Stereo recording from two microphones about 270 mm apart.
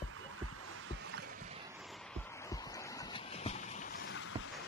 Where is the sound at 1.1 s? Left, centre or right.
Right.